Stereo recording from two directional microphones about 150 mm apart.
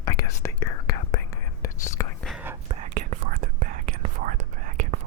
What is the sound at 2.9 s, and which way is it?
Whispering, 60° right (ahead or behind).